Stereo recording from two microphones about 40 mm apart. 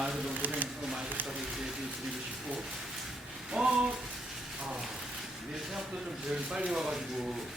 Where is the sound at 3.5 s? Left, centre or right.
Centre.